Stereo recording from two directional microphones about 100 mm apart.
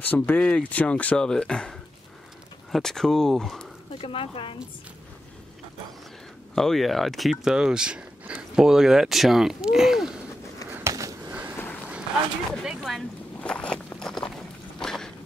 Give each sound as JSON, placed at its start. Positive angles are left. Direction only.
{"t": 0.0, "sound": "speech", "side_deg": 15}
{"t": 4.0, "sound": "speech", "side_deg": 65}
{"t": 6.5, "sound": "speech", "side_deg": 5}
{"t": 10.9, "sound": "a sound", "side_deg": -35}
{"t": 11.5, "sound": "run", "side_deg": 20}
{"t": 12.6, "sound": "speech", "side_deg": 0}
{"t": 13.4, "sound": "walk", "side_deg": 10}
{"t": 14.8, "sound": "a sound", "side_deg": 5}